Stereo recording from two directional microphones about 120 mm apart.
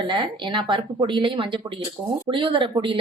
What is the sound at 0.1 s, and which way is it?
Speech, 40° right (ahead or behind).